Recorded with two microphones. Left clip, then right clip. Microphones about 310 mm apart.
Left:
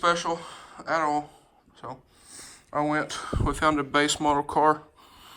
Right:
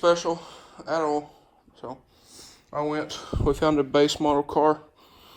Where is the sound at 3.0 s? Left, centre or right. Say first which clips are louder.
Right 3 dB; right.